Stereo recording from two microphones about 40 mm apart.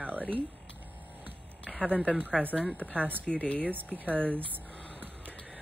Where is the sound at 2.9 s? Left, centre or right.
Right.